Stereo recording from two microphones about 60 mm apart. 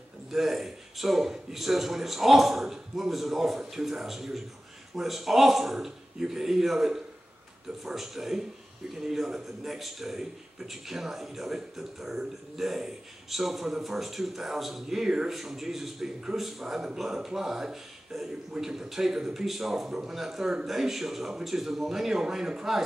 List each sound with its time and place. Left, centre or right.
0.3 s a man's voice: centre